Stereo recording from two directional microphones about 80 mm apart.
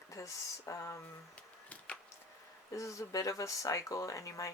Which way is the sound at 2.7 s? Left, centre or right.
Left.